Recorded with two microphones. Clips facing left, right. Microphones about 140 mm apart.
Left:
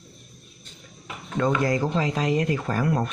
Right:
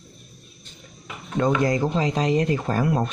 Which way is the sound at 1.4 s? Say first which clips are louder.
Right 2 dB; 20° right (ahead or behind).